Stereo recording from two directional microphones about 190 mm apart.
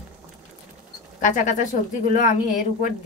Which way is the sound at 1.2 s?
40° left (ahead or behind).